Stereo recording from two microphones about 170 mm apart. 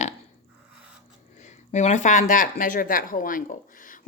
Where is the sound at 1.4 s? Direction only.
40° left (ahead or behind).